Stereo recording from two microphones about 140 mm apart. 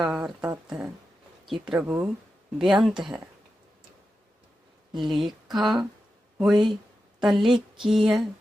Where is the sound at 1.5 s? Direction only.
35° right (ahead or behind).